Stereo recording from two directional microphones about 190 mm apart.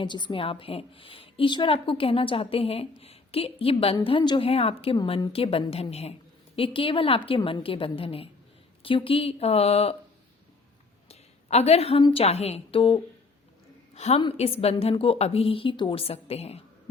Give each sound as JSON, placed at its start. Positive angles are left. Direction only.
{"t": 0.0, "sound": "a woman's voice", "side_deg": 25}
{"t": 11.1, "sound": "a woman's voice", "side_deg": 35}